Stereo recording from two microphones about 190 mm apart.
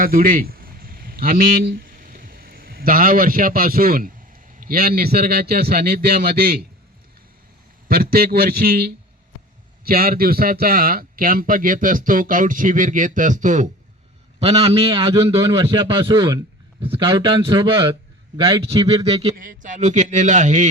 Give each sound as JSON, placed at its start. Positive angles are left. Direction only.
{"t": 0.0, "sound": "a sound", "side_deg": -50}
{"t": 4.6, "sound": "a man's voice", "side_deg": -50}
{"t": 7.9, "sound": "a man's voice", "side_deg": -50}